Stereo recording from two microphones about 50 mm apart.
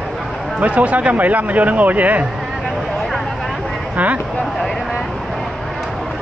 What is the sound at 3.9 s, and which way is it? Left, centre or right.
Speech, right.